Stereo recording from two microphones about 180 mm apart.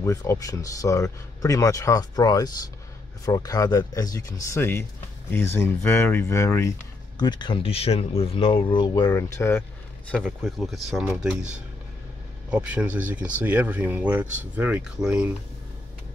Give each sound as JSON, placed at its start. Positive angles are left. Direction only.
{"t": 0.0, "sound": "speech", "side_deg": 15}
{"t": 10.1, "sound": "speech", "side_deg": 0}